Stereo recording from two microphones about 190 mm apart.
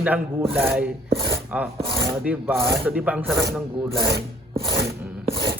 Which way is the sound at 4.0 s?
60° right (ahead or behind).